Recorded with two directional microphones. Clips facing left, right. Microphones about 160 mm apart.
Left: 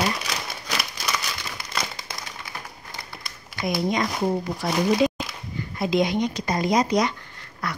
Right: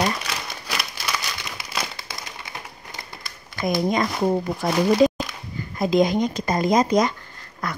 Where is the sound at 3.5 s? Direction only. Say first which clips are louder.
Right 3 dB; 45° right (ahead or behind).